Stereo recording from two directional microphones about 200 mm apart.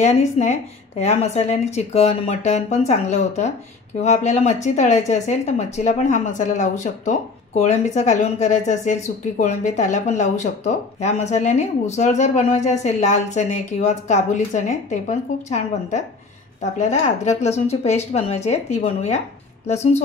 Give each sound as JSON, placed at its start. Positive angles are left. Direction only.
{"t": 0.0, "sound": "speech", "side_deg": 35}